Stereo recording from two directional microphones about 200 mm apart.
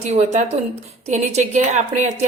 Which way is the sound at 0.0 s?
35° right (ahead or behind).